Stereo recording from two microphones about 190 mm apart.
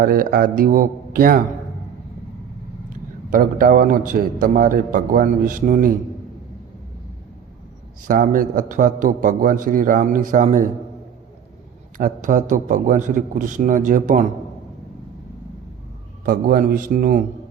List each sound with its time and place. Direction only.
0.0 s a man's voice: 50° right (ahead or behind)
3.2 s a man's voice: 45° right (ahead or behind)
8.0 s a man's voice: 45° right (ahead or behind)
11.9 s a man's voice: 45° right (ahead or behind)
16.2 s a man's voice: 50° right (ahead or behind)